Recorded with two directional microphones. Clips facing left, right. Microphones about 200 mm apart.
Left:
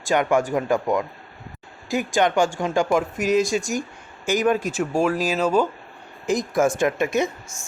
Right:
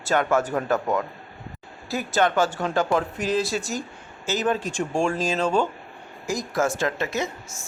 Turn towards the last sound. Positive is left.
turn(degrees=-5)  # may be behind; listen again after turning